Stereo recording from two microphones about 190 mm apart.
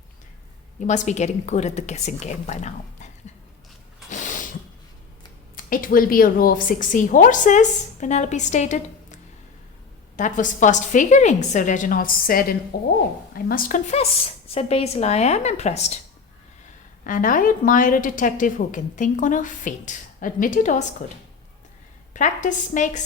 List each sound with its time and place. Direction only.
0.9 s a woman's voice: 40° left (ahead or behind)
4.1 s mechanisms: 40° left (ahead or behind)
5.6 s a woman's voice: 50° left (ahead or behind)
17.0 s a woman's voice: 45° left (ahead or behind)
22.1 s a woman's voice: 40° left (ahead or behind)